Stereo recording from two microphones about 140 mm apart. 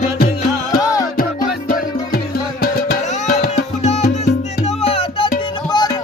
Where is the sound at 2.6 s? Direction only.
90° left.